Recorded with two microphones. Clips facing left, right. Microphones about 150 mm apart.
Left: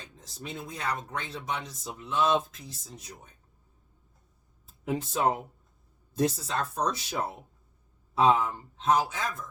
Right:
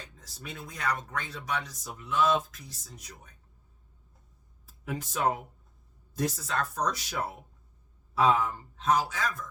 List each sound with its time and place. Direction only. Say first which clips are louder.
0.2 s speech: left 5 dB; 25° left (ahead or behind)
4.6 s speech: left 5 dB; 25° left (ahead or behind)